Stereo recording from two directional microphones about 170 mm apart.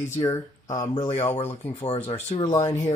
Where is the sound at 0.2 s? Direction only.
20° left (ahead or behind).